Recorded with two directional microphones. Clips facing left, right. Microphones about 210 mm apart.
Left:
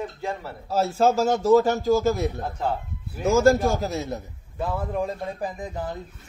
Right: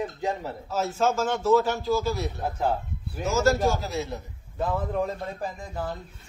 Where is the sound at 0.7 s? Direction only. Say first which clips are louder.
Left 5 dB; 35° left (ahead or behind).